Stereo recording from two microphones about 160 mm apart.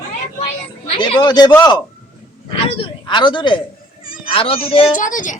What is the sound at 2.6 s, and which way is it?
Speech, 30° left (ahead or behind).